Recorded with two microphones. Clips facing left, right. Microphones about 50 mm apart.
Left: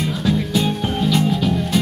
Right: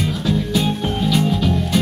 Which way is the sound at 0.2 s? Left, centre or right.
Centre.